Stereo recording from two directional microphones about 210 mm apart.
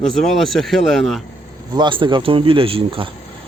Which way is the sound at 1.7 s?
20° right (ahead or behind).